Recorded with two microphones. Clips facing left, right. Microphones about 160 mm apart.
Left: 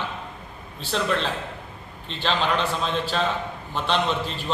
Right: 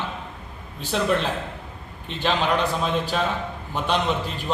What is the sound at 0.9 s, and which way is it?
A man's voice, 10° right (ahead or behind).